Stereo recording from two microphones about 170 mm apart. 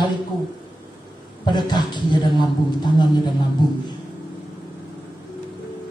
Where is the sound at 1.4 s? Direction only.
25° left (ahead or behind).